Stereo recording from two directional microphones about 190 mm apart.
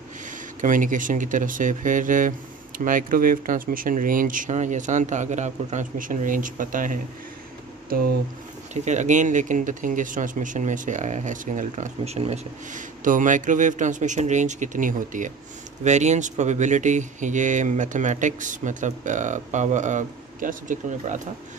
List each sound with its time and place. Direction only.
0.6 s speech: 45° right (ahead or behind)
8.7 s speech: 40° right (ahead or behind)